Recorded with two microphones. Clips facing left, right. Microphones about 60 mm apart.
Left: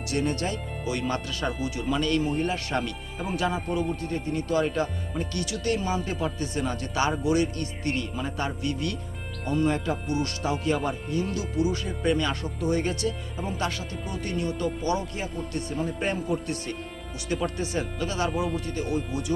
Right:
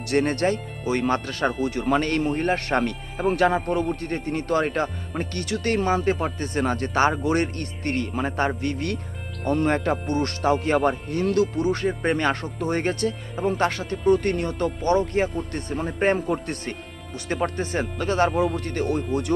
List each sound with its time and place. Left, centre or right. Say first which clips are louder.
0.1 s speech: right 6 dB; right